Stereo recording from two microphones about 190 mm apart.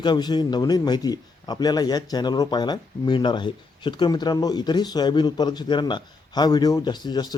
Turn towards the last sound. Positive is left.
turn(degrees=20)  # may be behind; listen again after turning